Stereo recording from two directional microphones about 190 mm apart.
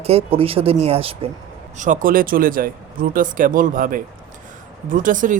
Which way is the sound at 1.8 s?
45° right (ahead or behind).